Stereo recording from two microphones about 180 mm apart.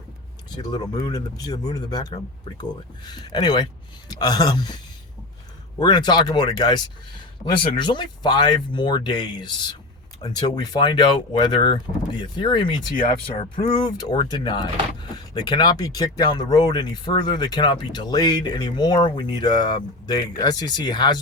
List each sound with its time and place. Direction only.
0.5 s speech: 20° left (ahead or behind)
5.8 s speech: 25° left (ahead or behind)